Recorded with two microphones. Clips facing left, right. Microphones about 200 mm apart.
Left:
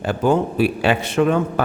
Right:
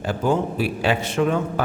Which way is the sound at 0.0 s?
65° left (ahead or behind).